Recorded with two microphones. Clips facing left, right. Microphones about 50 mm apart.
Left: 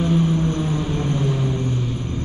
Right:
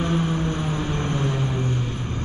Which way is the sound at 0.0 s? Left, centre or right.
Centre.